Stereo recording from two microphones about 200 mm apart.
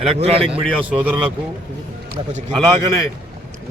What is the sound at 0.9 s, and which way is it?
Speech, 5° right (ahead or behind).